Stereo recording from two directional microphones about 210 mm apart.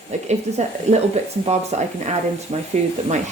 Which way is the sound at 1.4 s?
30° right (ahead or behind).